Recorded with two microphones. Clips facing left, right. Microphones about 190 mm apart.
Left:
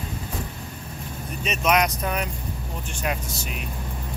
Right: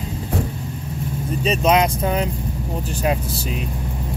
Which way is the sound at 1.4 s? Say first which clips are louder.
Right 5 dB; 30° right (ahead or behind).